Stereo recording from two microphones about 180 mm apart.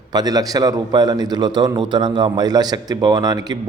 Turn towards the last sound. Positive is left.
turn(degrees=-20)  # may be behind; listen again after turning